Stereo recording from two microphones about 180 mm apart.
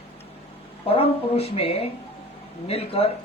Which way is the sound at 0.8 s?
35° left (ahead or behind).